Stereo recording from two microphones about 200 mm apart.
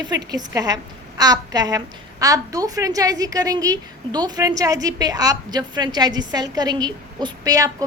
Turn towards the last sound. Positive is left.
turn(degrees=-20)  # may be behind; listen again after turning